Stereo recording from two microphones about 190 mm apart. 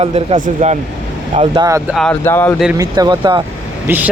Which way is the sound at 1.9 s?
5° left (ahead or behind).